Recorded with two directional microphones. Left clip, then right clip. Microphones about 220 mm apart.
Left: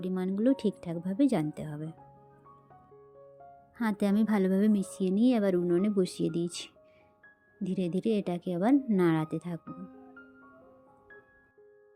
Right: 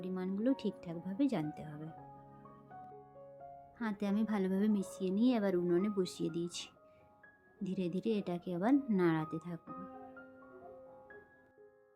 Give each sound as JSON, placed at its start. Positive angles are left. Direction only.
{"t": 0.0, "sound": "a woman's voice", "side_deg": 25}
{"t": 3.8, "sound": "a woman's voice", "side_deg": 30}